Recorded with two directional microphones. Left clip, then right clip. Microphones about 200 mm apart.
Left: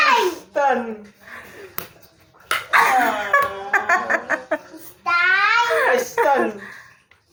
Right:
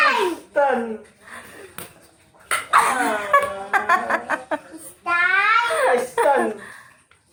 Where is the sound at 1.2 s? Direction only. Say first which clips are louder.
Left 1 dB; 10° right (ahead or behind).